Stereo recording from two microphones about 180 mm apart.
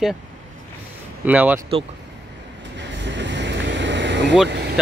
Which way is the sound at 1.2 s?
10° right (ahead or behind).